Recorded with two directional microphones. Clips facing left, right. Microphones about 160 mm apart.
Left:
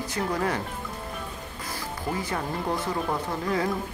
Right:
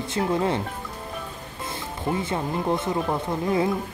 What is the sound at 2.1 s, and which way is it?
Speech, 20° right (ahead or behind).